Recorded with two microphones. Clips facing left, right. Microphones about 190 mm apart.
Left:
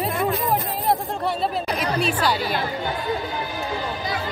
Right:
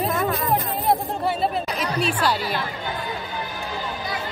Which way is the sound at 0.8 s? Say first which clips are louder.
Right 1 dB; centre (ahead or behind).